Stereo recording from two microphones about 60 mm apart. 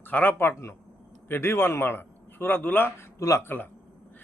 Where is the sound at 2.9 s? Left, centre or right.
Left.